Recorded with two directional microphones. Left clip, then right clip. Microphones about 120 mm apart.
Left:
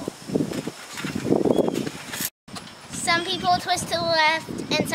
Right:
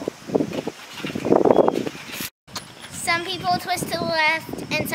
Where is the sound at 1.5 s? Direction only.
40° right (ahead or behind).